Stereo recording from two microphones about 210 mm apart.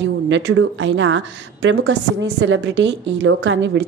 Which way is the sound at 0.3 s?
60° right (ahead or behind).